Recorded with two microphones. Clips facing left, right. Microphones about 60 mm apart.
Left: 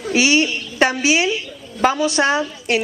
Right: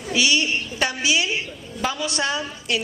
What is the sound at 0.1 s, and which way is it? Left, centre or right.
A woman's voice, left.